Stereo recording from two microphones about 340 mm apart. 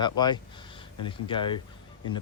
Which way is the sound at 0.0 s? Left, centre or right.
Centre.